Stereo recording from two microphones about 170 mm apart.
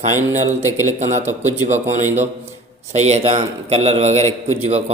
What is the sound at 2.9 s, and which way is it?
A man's voice, 40° right (ahead or behind).